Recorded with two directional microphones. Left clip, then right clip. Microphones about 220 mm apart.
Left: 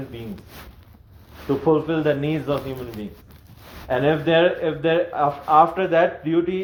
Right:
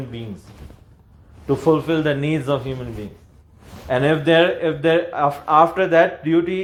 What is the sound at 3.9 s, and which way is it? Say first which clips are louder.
Speech: right 2 dB; 50° right (ahead or behind).